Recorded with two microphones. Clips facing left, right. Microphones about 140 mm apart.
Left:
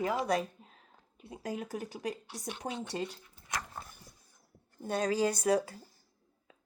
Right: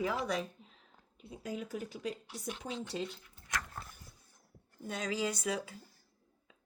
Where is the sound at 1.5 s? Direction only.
60° left (ahead or behind).